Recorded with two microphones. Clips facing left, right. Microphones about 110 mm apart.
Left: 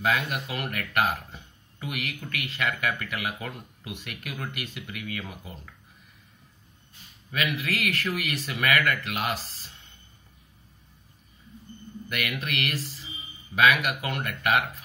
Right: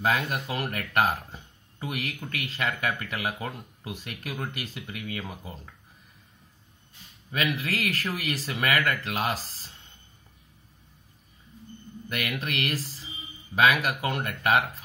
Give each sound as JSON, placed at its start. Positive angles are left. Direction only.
{"t": 0.0, "sound": "speech", "side_deg": -35}
{"t": 7.2, "sound": "speech", "side_deg": -35}
{"t": 12.1, "sound": "speech", "side_deg": -30}